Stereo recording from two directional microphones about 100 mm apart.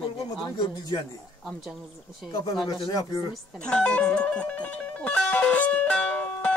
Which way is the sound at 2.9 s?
35° left (ahead or behind).